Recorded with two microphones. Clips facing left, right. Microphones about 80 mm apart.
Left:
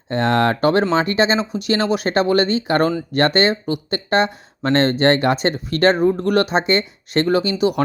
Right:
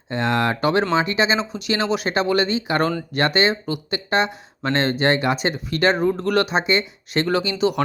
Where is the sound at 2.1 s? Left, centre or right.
Left.